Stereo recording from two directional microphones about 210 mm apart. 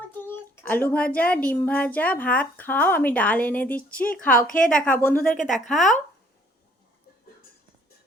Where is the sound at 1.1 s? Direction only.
5° left (ahead or behind).